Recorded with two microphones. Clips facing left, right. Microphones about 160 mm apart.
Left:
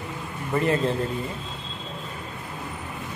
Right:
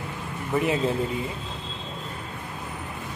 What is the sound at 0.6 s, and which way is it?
Speech, 5° right (ahead or behind).